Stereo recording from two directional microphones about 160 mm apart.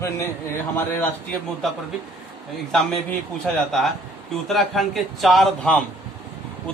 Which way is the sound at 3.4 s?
Centre (ahead or behind).